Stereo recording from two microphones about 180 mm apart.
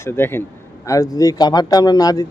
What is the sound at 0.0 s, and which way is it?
Speech, 10° left (ahead or behind).